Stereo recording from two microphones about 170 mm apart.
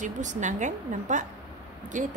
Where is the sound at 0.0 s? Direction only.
45° right (ahead or behind).